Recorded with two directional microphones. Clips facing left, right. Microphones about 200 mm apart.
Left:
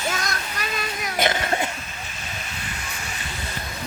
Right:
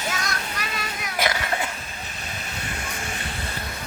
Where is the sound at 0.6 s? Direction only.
30° left (ahead or behind).